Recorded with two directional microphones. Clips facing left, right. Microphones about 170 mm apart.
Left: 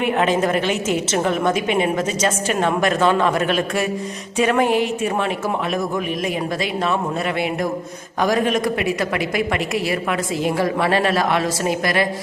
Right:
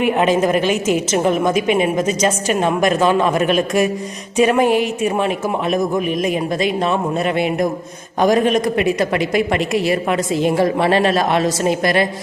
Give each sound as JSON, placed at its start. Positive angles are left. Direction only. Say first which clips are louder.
{"t": 0.2, "sound": "a woman's voice", "louder": "right 3 dB", "side_deg": -15}